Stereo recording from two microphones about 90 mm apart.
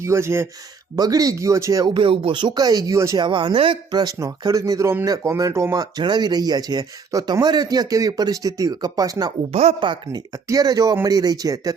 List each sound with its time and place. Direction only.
0.0 s speech: 30° right (ahead or behind)
0.9 s speech: 45° right (ahead or behind)
1.9 s speech: 70° right (ahead or behind); by 3.2 s 35° right (ahead or behind)
3.2 s speech: 60° right (ahead or behind)
3.9 s speech: 45° right (ahead or behind)
6.0 s speech: 50° right (ahead or behind)
9.8 s speech: 60° right (ahead or behind)
10.5 s speech: 45° right (ahead or behind)